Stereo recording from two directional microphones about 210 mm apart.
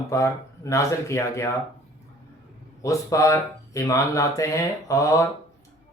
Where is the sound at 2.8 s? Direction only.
15° left (ahead or behind).